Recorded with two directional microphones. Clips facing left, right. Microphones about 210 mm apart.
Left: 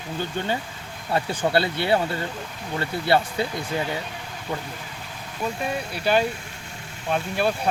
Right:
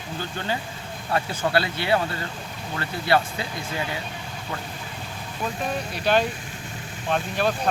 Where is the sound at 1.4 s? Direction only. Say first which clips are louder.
Left 1 dB; 20° left (ahead or behind).